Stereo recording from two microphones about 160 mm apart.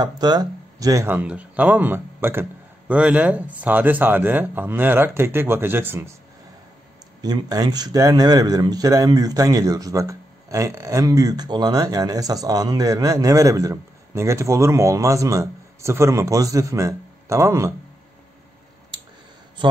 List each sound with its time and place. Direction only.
0.0 s speech: 25° right (ahead or behind)
7.2 s speech: 25° right (ahead or behind)